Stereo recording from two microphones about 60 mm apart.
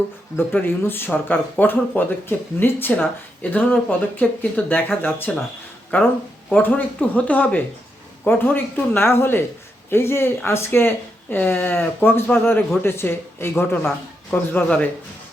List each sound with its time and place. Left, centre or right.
0.3 s speech: left
14.3 s speech: left